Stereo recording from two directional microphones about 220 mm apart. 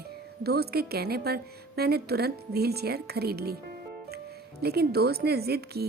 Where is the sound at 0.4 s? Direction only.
45° right (ahead or behind).